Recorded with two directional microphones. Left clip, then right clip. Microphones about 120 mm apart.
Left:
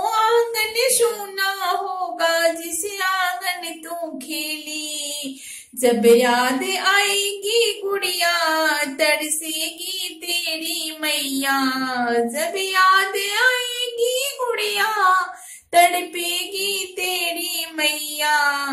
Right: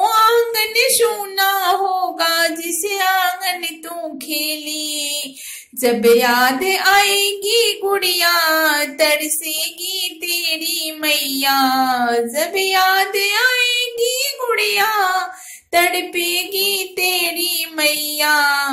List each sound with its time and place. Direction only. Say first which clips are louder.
0.0 s female singing: right 5 dB; 25° right (ahead or behind)
2.1 s a sound: right 2 dB; 20° right (ahead or behind)
5.8 s female singing: right 1 dB; 20° right (ahead or behind)
10.2 s child singing: right 3 dB; 15° right (ahead or behind)